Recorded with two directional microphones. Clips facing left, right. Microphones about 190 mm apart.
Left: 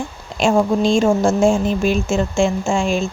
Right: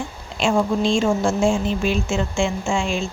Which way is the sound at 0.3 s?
45° left (ahead or behind).